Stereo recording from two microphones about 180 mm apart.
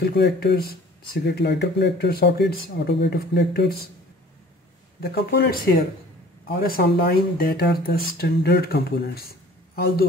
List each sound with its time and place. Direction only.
0.0 s speech: 65° left (ahead or behind)
5.0 s speech: 65° left (ahead or behind)